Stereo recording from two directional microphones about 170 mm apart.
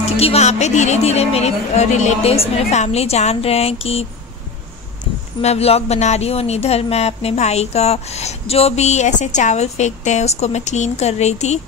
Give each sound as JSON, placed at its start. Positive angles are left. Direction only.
{"t": 0.2, "sound": "speech", "side_deg": 40}
{"t": 5.4, "sound": "speech", "side_deg": 40}